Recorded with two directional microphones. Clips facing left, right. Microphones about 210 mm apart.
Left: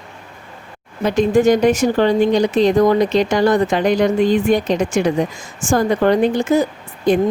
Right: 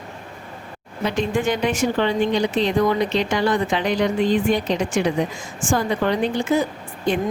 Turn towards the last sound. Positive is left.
turn(degrees=40)  # may be behind; listen again after turning